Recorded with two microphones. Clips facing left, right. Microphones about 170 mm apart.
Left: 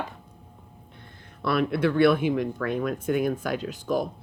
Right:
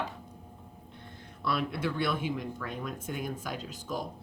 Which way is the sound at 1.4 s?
65° left (ahead or behind).